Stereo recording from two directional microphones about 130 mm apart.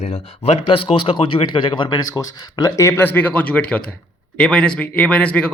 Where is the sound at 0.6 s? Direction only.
40° left (ahead or behind).